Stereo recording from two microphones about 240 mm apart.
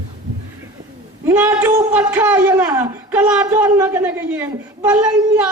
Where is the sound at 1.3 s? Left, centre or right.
Centre.